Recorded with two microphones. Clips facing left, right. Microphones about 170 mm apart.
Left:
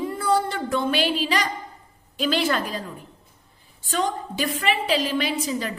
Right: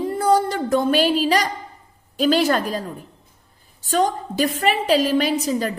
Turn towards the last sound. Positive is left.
turn(degrees=-45)  # may be behind; listen again after turning